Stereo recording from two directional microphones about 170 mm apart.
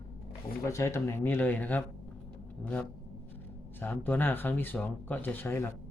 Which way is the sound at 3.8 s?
10° left (ahead or behind).